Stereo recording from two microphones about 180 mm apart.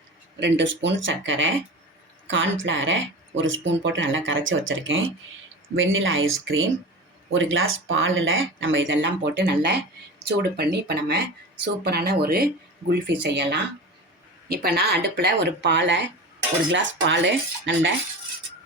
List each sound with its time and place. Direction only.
0.3 s speech: 85° right
14.4 s speech: 60° right (ahead or behind)
16.7 s speech: 90° right